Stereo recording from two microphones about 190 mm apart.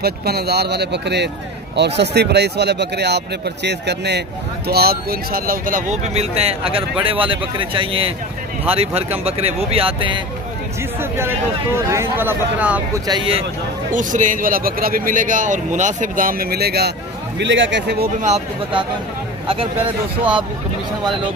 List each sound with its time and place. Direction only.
0.0 s speech: 55° right (ahead or behind); by 10.2 s 25° right (ahead or behind)
11.0 s speech: 10° right (ahead or behind)
13.0 s speech: 25° right (ahead or behind)
13.9 s a man's voice: 45° right (ahead or behind)
17.4 s speech: 70° right (ahead or behind)
18.2 s speech: 30° right (ahead or behind)